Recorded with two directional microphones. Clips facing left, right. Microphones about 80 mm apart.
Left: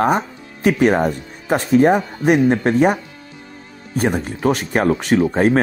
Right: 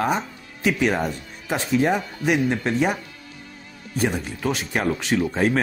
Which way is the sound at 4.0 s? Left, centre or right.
Left.